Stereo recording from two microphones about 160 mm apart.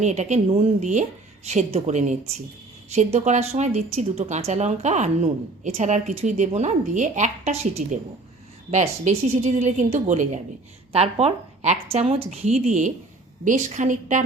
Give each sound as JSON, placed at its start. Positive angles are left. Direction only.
{"t": 0.0, "sound": "speech", "side_deg": -45}